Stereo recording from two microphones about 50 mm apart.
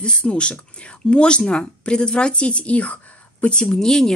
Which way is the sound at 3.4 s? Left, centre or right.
Centre.